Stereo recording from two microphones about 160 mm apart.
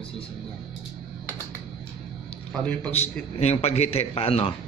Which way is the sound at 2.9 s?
40° left (ahead or behind).